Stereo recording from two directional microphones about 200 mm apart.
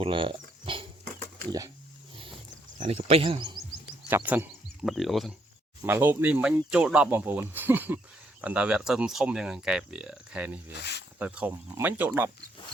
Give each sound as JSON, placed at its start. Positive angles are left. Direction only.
{"t": 0.0, "sound": "speech", "side_deg": -25}
{"t": 2.8, "sound": "speech", "side_deg": -30}
{"t": 4.1, "sound": "speech", "side_deg": -10}
{"t": 10.8, "sound": "speech", "side_deg": 60}
{"t": 11.2, "sound": "speech", "side_deg": -5}